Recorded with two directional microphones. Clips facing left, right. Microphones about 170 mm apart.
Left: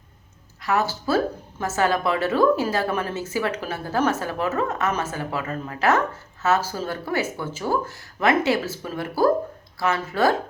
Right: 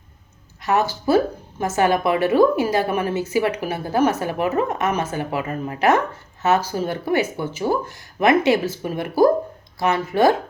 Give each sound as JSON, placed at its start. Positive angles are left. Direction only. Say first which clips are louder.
{"t": 0.6, "sound": "a woman's voice", "louder": "right 3 dB", "side_deg": -20}